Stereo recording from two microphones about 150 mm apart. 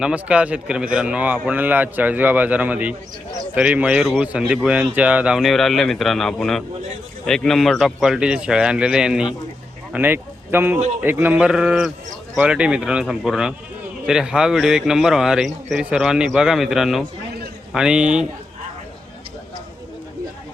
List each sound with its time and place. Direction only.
0.0 s a man's voice: 10° right (ahead or behind)